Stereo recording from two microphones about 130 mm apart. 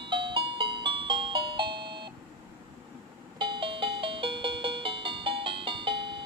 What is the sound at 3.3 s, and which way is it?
Music, 40° right (ahead or behind).